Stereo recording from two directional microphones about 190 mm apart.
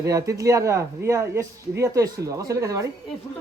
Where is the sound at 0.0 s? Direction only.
15° right (ahead or behind).